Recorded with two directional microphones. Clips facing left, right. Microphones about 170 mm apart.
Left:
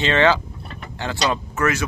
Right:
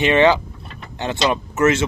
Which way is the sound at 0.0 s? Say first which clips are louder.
Right 3 dB; 15° right (ahead or behind).